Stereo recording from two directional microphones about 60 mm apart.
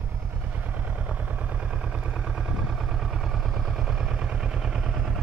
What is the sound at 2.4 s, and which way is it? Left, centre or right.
Vehicle, centre.